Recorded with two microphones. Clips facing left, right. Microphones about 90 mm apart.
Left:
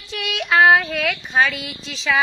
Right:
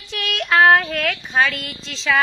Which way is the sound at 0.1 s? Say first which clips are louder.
Even; centre (ahead or behind).